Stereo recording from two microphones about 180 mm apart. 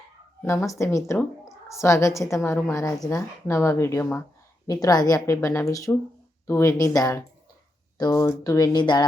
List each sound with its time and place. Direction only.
0.4 s a woman's voice: 15° left (ahead or behind)